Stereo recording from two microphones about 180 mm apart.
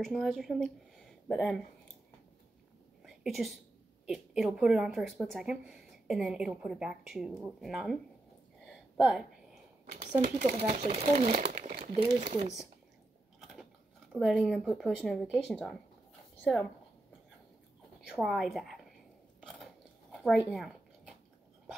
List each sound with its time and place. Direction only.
0.0 s a woman's voice: centre (ahead or behind)
3.3 s a woman's voice: centre (ahead or behind)
8.6 s a sound: centre (ahead or behind)
10.2 s speech: 45° right (ahead or behind)
11.1 s speech: 50° right (ahead or behind)
13.4 s gears: centre (ahead or behind)
14.1 s a woman's voice: centre (ahead or behind)
18.1 s a woman's voice: centre (ahead or behind)
19.4 s scissors: centre (ahead or behind)